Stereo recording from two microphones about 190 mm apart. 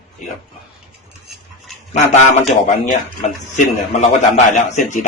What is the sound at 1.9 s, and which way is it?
A man's voice, 35° left (ahead or behind).